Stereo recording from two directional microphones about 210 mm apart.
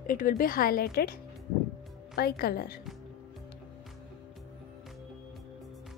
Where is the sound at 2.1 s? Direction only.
45° left (ahead or behind).